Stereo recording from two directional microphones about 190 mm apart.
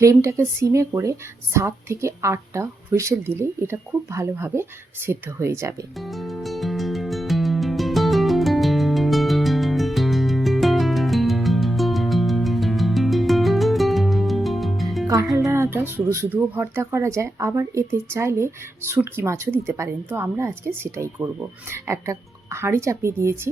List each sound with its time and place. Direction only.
0.0 s speech: 15° right (ahead or behind)
6.0 s music: centre (ahead or behind)
15.0 s music: 15° right (ahead or behind)
15.4 s speech: 15° right (ahead or behind)